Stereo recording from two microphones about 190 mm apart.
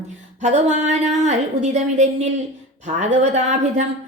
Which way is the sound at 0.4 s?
35° right (ahead or behind).